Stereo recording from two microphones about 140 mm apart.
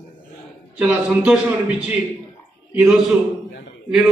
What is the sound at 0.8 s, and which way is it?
Speech, 10° right (ahead or behind).